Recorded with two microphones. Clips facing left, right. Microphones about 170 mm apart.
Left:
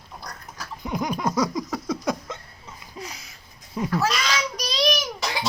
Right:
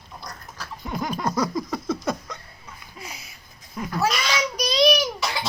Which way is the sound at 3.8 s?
25° left (ahead or behind).